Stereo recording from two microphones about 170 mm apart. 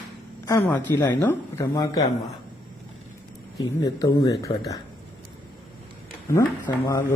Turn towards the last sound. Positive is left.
turn(degrees=20)  # may be behind; listen again after turning